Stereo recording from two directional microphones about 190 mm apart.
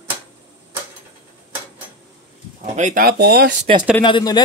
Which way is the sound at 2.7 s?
45° right (ahead or behind).